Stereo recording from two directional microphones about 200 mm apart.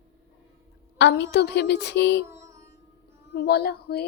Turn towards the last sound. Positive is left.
turn(degrees=50)  # may be behind; listen again after turning